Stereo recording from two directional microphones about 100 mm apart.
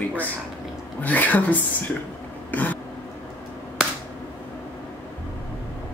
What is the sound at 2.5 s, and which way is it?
Throat clearing, 15° left (ahead or behind).